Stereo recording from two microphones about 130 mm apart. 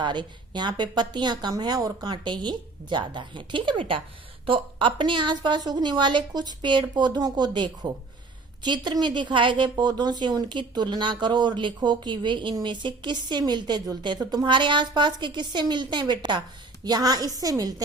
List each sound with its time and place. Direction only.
0.0 s a woman's voice: 35° right (ahead or behind)